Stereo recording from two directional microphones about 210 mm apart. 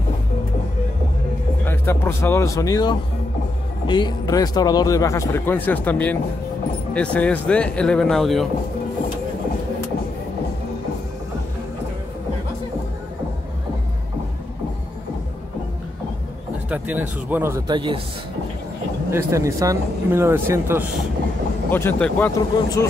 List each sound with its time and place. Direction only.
1.6 s speech: 10° left (ahead or behind)
16.6 s speech: 5° right (ahead or behind); by 18.0 s 25° right (ahead or behind)
19.0 s speech: 15° right (ahead or behind)
21.6 s speech: 10° left (ahead or behind)